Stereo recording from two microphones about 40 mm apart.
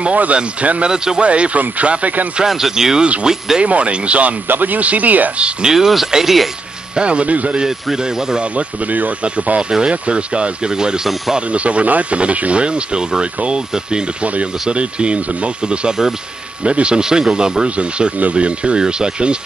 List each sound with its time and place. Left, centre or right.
0.0 s speech: right
0.9 s speech: centre
1.2 s speech: right
2.4 s speech: centre
3.6 s speech: right
4.5 s speech: right
5.7 s speech: centre
7.0 s speech: right
7.6 s speech: centre
8.4 s speech: right
11.3 s speech: right
17.6 s speech: right